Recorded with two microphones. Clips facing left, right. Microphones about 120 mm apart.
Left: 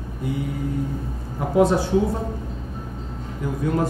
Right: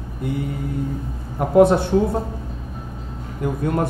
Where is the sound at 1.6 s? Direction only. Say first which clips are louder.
Right 4 dB; 60° right (ahead or behind).